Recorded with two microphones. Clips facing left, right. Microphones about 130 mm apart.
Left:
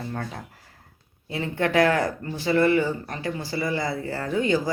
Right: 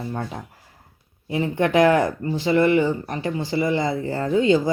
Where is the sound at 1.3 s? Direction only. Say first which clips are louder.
Right 4 dB; 20° right (ahead or behind).